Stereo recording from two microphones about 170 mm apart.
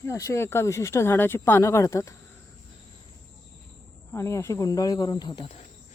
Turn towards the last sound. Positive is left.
turn(degrees=25)  # may be behind; listen again after turning